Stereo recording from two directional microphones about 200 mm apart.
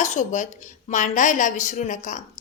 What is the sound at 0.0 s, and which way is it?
Speech, 35° left (ahead or behind).